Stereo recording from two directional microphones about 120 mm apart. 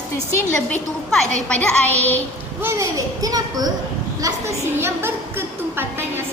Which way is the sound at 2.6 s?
20° right (ahead or behind).